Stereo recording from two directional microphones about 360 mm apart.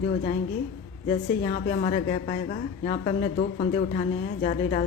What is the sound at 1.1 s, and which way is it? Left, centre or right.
A woman's voice, centre.